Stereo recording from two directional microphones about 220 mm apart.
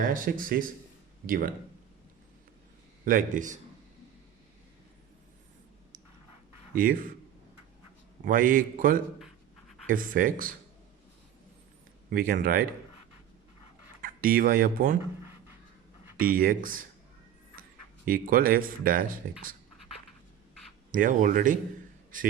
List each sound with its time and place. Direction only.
0.0 s a man's voice: 40° right (ahead or behind)
3.0 s a man's voice: 35° right (ahead or behind)
6.7 s a man's voice: 40° right (ahead or behind)
8.2 s a man's voice: 40° right (ahead or behind)
12.1 s a man's voice: 40° right (ahead or behind)
14.0 s speech: 40° right (ahead or behind)
16.1 s a man's voice: 40° right (ahead or behind)
20.9 s a man's voice: 35° right (ahead or behind)